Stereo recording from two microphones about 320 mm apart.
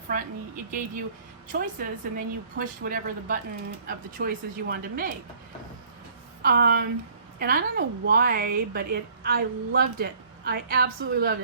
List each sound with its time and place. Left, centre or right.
0.1 s a woman's voice: right
1.8 s a woman's voice: right
6.4 s a woman's voice: right